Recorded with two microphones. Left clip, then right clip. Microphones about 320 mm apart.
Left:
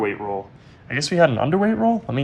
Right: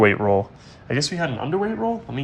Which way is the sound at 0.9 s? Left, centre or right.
Centre.